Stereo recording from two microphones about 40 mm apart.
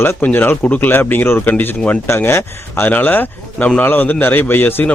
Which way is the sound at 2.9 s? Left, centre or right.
Left.